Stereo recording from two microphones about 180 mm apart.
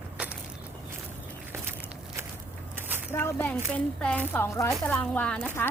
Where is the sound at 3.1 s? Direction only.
10° left (ahead or behind).